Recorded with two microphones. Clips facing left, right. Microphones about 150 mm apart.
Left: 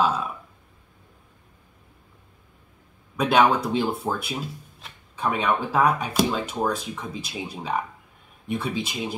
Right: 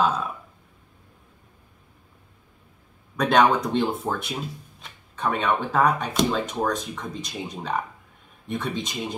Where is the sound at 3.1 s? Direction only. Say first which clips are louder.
Even; 5° left (ahead or behind).